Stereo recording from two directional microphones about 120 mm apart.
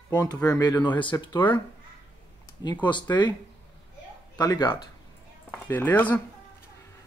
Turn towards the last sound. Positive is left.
turn(degrees=15)  # may be behind; listen again after turning